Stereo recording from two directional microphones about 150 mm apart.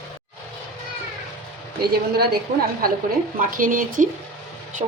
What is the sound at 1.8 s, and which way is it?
A woman's voice, 90° right.